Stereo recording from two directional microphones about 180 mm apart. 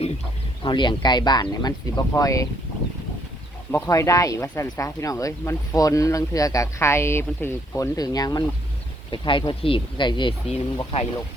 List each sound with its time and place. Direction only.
0.6 s speech: 25° left (ahead or behind)
3.7 s speech: 15° left (ahead or behind); by 11.0 s 30° left (ahead or behind)